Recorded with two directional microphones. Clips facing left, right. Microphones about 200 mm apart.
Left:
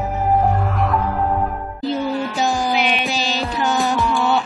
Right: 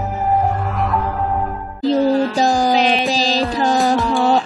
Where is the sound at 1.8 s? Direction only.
35° right (ahead or behind).